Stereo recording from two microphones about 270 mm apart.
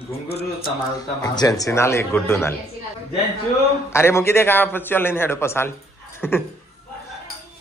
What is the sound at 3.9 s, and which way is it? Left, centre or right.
A man's voice, centre.